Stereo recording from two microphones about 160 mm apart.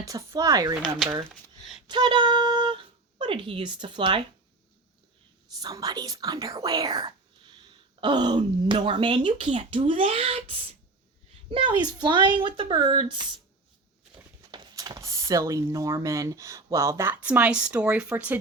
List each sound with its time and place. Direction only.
0.1 s speech: 20° right (ahead or behind)
0.9 s speech: centre (ahead or behind)
1.3 s a sound: centre (ahead or behind)
1.9 s speech: 30° right (ahead or behind)
5.6 s speech: 25° right (ahead or behind)
14.5 s speech: 25° right (ahead or behind); by 18.3 s 10° right (ahead or behind)